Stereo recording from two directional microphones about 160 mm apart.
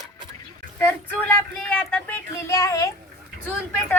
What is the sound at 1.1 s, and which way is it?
A woman's voice, 10° left (ahead or behind).